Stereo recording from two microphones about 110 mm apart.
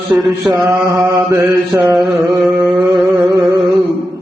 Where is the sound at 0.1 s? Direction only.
15° right (ahead or behind).